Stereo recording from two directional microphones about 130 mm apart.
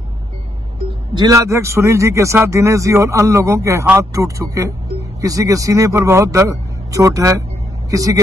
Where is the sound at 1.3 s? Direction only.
25° right (ahead or behind).